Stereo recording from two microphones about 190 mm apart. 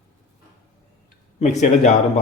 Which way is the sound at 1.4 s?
40° left (ahead or behind).